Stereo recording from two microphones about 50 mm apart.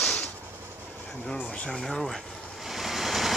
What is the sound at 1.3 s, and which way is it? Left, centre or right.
Speech, left.